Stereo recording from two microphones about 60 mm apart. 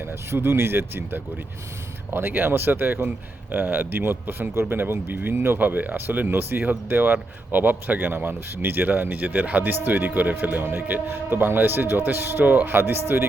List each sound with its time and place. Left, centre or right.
0.0 s a man's voice: right